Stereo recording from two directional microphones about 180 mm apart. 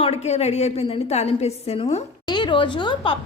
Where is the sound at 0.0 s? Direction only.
35° left (ahead or behind).